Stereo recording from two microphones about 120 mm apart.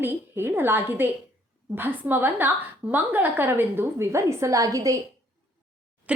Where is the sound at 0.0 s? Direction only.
20° right (ahead or behind).